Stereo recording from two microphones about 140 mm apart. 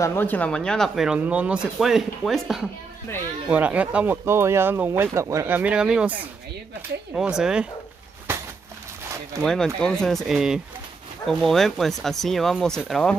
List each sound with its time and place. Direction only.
0.0 s speech: 15° left (ahead or behind); by 5.6 s 20° right (ahead or behind)
5.6 s speech: 5° right (ahead or behind)
7.2 s speech: 5° right (ahead or behind)
9.4 s speech: 5° left (ahead or behind)